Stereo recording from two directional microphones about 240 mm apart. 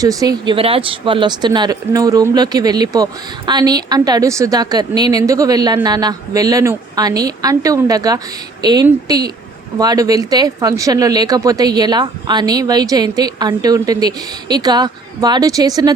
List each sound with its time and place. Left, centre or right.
0.0 s speech: centre